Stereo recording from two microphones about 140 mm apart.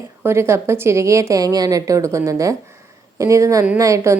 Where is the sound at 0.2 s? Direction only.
20° right (ahead or behind).